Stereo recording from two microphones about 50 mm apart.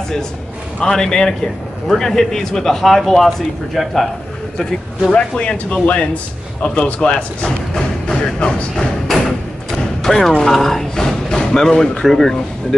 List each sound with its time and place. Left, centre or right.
0.8 s a man's voice: centre
5.4 s speech: left
7.7 s music: centre
10.4 s a man's voice: centre